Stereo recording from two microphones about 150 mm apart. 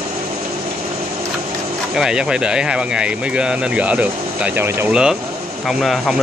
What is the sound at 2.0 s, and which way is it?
Speech, 5° right (ahead or behind).